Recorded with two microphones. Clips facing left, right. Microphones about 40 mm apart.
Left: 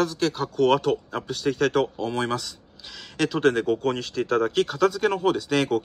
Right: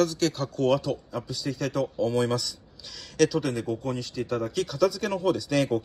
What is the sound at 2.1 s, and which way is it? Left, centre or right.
Speech, left.